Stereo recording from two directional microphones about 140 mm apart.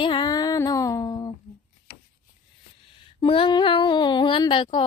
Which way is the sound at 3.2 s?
40° left (ahead or behind).